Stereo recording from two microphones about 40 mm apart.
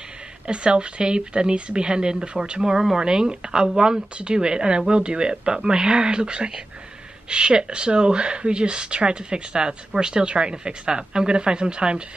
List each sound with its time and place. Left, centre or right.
0.5 s speech: right
2.6 s speech: centre